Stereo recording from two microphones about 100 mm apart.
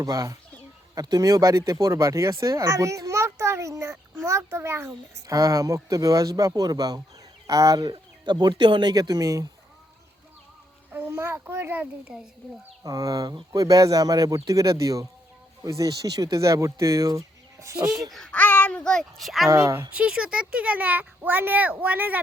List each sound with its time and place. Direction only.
0.0 s speech: 35° right (ahead or behind)
10.9 s a child's voice: 20° right (ahead or behind)
12.8 s speech: 35° right (ahead or behind)
18.1 s a child's voice: 5° left (ahead or behind)
18.3 s babbling: 20° left (ahead or behind)
18.8 s a child's voice: 5° left (ahead or behind)
19.5 s a child's voice: 30° right (ahead or behind)
19.9 s speech: 10° right (ahead or behind)